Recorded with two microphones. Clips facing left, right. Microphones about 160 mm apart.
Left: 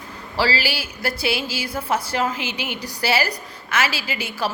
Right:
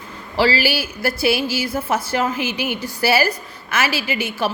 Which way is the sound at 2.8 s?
25° right (ahead or behind).